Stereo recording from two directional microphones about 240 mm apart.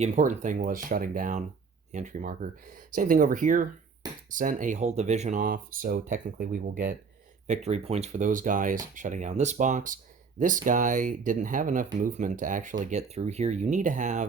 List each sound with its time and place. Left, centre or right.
0.0 s speech: right